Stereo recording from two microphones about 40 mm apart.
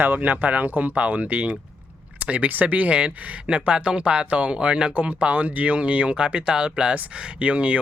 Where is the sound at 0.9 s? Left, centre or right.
Right.